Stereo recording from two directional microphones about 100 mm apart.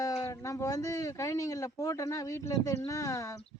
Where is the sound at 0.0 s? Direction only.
30° left (ahead or behind).